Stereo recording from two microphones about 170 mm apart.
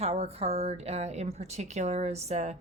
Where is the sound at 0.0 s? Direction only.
35° right (ahead or behind).